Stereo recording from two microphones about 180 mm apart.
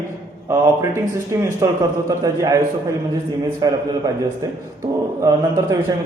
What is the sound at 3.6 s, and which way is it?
Speech, 20° right (ahead or behind).